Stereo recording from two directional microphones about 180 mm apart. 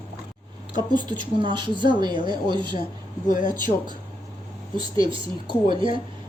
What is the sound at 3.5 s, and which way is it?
Speech, 25° right (ahead or behind).